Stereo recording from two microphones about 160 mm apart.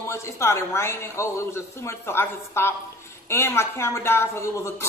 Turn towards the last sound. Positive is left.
turn(degrees=15)  # may be behind; listen again after turning